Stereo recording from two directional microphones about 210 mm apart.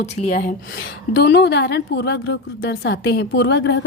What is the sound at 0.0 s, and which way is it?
A woman's voice, 35° left (ahead or behind).